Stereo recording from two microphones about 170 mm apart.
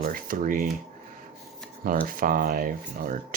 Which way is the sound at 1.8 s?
55° right (ahead or behind).